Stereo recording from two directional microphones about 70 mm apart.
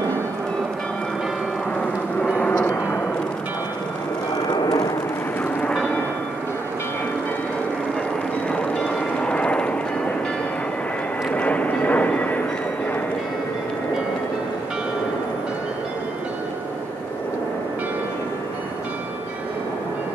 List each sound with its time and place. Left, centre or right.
2.3 s a sound: left
4.5 s vehicle: left
8.5 s vehicle: centre
11.3 s vehicle: centre